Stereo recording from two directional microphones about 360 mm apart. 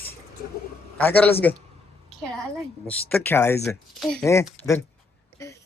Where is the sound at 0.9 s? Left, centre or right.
Centre.